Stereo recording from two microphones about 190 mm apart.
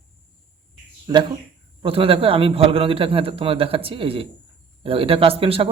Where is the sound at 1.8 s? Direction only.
30° right (ahead or behind).